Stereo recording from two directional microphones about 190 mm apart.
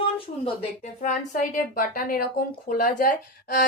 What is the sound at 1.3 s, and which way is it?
A woman's voice, 45° left (ahead or behind).